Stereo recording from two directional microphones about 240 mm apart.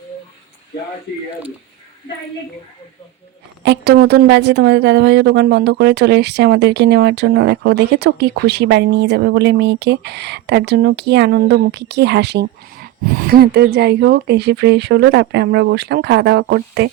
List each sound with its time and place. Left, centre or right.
3.6 s a woman's voice: right